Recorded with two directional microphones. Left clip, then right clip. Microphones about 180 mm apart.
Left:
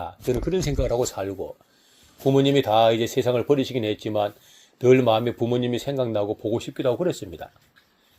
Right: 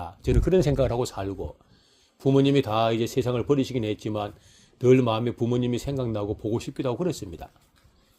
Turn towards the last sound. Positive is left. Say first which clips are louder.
# left 4 dB
turn(degrees=-55)  # may be behind; listen again after turning